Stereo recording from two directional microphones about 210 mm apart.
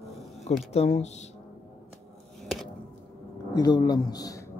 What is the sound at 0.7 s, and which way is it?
Speech, 30° left (ahead or behind).